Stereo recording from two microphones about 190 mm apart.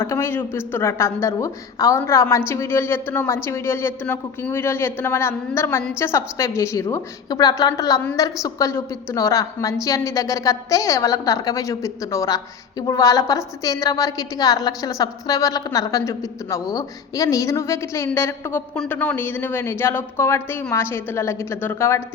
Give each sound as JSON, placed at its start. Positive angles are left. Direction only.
{"t": 0.0, "sound": "a woman's voice", "side_deg": 15}